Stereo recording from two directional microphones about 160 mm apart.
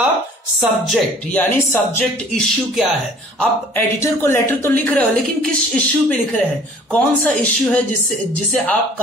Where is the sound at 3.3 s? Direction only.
10° left (ahead or behind).